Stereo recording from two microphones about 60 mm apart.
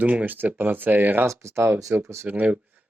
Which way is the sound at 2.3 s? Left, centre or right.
Right.